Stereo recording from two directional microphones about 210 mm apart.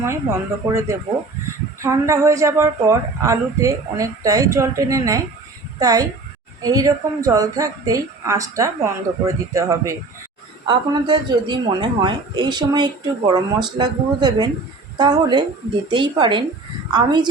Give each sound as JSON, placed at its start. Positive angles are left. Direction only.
{"t": 0.0, "sound": "a woman's voice", "side_deg": -10}